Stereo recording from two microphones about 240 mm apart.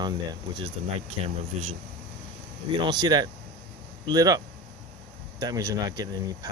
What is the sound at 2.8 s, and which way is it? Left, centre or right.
Speech, centre.